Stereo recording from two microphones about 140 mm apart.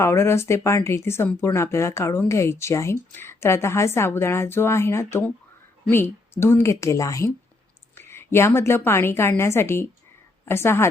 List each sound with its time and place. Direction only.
0.0 s a woman's voice: 20° left (ahead or behind)